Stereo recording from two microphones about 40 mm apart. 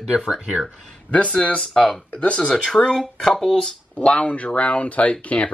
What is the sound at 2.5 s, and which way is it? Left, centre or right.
Speech, centre.